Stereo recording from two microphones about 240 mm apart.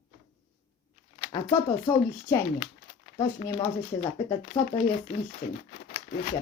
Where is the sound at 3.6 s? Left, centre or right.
Left.